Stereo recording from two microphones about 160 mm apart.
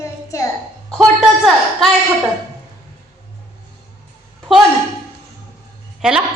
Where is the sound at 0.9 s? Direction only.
Centre (ahead or behind).